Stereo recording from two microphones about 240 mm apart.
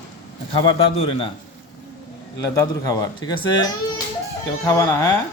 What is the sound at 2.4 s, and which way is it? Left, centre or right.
A man's voice, centre.